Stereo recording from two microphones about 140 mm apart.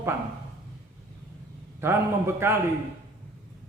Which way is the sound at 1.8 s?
15° right (ahead or behind).